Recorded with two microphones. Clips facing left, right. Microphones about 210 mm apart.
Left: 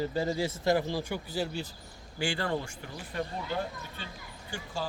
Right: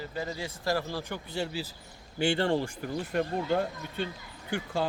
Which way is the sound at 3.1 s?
65° right (ahead or behind).